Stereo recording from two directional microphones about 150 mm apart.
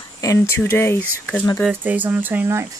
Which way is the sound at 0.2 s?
20° left (ahead or behind).